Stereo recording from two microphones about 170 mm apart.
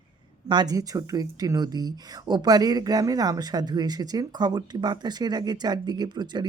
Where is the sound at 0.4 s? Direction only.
25° right (ahead or behind).